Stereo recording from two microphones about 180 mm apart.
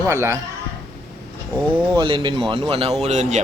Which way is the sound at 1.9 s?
30° right (ahead or behind).